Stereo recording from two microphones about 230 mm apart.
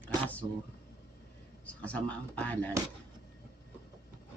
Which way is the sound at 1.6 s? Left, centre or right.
Centre.